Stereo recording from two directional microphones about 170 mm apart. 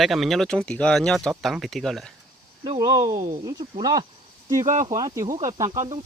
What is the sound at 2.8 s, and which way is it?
Speech, 20° right (ahead or behind).